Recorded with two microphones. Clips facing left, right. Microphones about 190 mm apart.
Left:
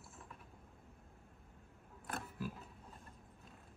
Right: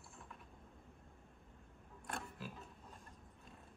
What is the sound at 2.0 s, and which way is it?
Pig, centre (ahead or behind).